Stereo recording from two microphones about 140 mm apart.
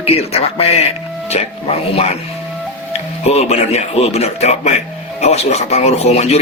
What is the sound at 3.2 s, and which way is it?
A man's voice, 50° left (ahead or behind).